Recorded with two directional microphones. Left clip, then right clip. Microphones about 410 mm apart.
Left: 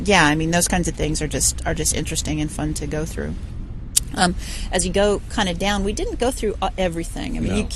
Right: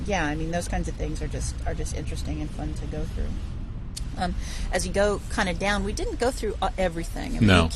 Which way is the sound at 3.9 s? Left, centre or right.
Left.